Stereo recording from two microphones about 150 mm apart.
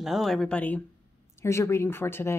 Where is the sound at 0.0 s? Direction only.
Centre (ahead or behind).